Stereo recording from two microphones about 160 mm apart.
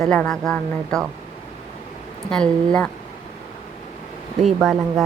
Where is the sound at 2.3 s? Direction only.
5° left (ahead or behind).